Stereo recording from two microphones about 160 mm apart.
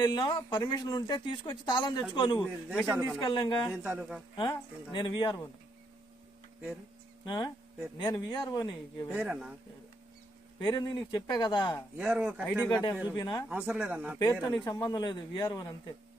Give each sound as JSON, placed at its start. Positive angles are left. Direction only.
{"t": 0.0, "sound": "speech", "side_deg": 25}
{"t": 2.4, "sound": "a man's voice", "side_deg": -5}
{"t": 3.2, "sound": "speech", "side_deg": 30}
{"t": 3.8, "sound": "a man's voice", "side_deg": -5}
{"t": 4.4, "sound": "speech", "side_deg": 30}
{"t": 7.2, "sound": "speech", "side_deg": 30}
{"t": 9.1, "sound": "a man's voice", "side_deg": -5}
{"t": 10.6, "sound": "speech", "side_deg": 25}
{"t": 12.0, "sound": "a man's voice", "side_deg": -5}
{"t": 12.6, "sound": "speech", "side_deg": 25}
{"t": 13.5, "sound": "a man's voice", "side_deg": -10}
{"t": 14.6, "sound": "speech", "side_deg": 25}